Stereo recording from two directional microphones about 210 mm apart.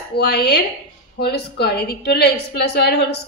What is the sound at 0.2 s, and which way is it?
A woman's voice, 50° left (ahead or behind).